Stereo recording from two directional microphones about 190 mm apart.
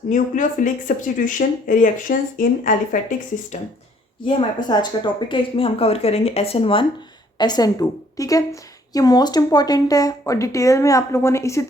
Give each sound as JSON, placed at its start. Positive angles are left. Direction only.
{"t": 0.1, "sound": "speech", "side_deg": 40}
{"t": 4.3, "sound": "speech", "side_deg": 25}